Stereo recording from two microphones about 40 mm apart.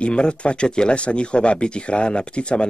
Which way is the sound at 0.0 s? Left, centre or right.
Left.